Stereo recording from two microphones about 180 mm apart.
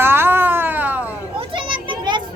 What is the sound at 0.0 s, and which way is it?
Cat, 10° right (ahead or behind).